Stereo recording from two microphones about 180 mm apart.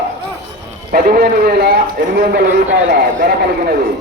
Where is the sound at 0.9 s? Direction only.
55° right (ahead or behind).